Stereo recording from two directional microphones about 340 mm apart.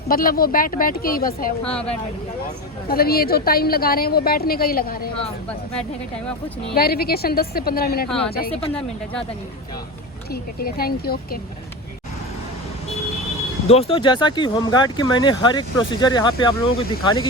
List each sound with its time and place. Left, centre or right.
0.1 s a woman's voice: left
1.6 s a woman's voice: centre
2.9 s a woman's voice: left
6.7 s a woman's voice: left
10.3 s a woman's voice: left
13.7 s speech: centre